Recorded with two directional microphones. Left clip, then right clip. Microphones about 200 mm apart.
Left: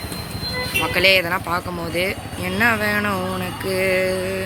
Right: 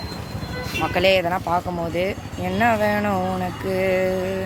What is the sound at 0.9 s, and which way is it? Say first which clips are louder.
Speech: left 2 dB; 30° right (ahead or behind).